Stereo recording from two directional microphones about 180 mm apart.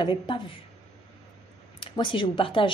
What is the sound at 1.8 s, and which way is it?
Speech, 25° left (ahead or behind).